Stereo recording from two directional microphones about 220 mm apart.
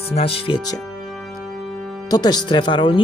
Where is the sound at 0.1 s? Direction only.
25° left (ahead or behind).